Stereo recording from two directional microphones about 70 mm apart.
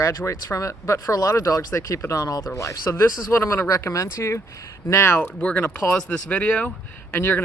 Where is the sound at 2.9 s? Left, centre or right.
Left.